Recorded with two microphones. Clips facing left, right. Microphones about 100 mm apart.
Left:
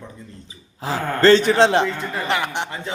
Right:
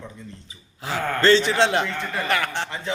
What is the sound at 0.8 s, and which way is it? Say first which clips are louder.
A man's voice: left 4 dB; 35° left (ahead or behind).